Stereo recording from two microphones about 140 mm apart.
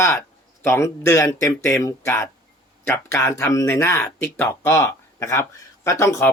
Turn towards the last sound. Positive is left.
turn(degrees=20)  # may be behind; listen again after turning